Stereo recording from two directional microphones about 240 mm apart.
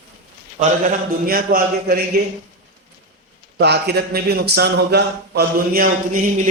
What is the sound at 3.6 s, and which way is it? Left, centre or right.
A man's voice, right.